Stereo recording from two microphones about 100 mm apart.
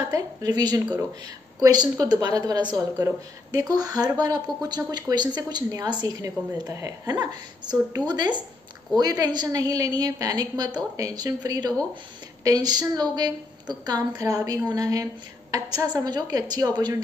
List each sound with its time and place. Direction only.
0.1 s a woman's voice: 45° right (ahead or behind)